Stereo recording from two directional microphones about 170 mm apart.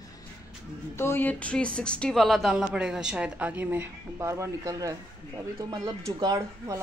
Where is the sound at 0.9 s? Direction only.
15° left (ahead or behind); by 5.0 s 20° right (ahead or behind).